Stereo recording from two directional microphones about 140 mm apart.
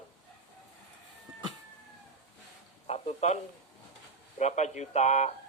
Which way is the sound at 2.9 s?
50° left (ahead or behind).